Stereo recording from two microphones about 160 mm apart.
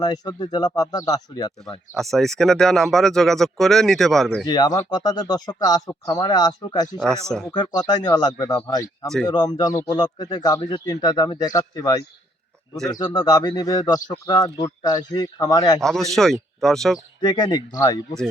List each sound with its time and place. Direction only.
0.0 s speech: 25° left (ahead or behind)
2.0 s speech: centre (ahead or behind)
4.4 s speech: 25° left (ahead or behind)
7.0 s speech: 5° left (ahead or behind)
7.5 s speech: 25° left (ahead or behind)
15.8 s speech: centre (ahead or behind)
17.2 s speech: 25° left (ahead or behind)